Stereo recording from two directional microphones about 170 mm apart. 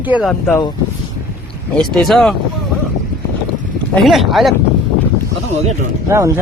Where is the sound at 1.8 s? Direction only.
Centre (ahead or behind).